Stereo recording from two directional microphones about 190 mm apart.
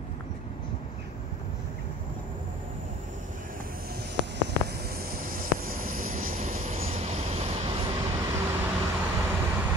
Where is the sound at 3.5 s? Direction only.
50° right (ahead or behind).